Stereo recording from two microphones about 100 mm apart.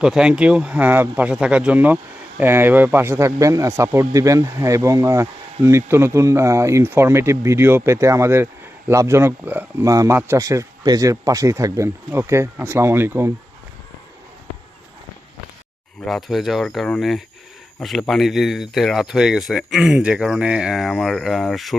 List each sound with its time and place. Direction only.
0.0 s speech: 5° right (ahead or behind)
9.8 s speech: 35° right (ahead or behind)
16.0 s speech: centre (ahead or behind)